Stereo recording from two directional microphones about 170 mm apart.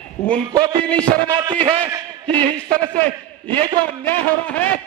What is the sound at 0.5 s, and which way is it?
Music, 30° right (ahead or behind).